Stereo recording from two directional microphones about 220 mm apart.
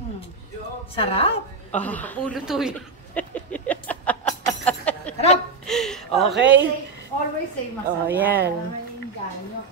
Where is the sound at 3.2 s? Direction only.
5° left (ahead or behind).